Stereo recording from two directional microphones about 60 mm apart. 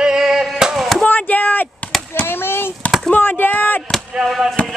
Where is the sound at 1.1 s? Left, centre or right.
Left.